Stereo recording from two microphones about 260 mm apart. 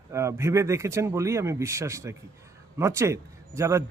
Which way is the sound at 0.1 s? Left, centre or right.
Centre.